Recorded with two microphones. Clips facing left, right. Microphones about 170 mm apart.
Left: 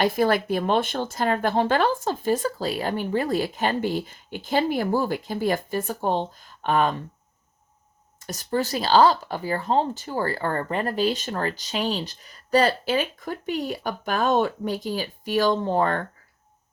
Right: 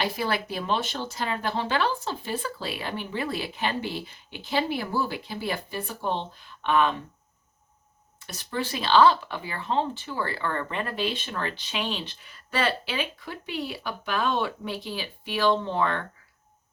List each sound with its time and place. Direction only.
0.0 s speech: 50° left (ahead or behind)
8.2 s speech: 45° left (ahead or behind)